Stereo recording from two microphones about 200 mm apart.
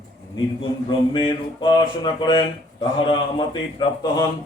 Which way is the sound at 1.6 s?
25° left (ahead or behind).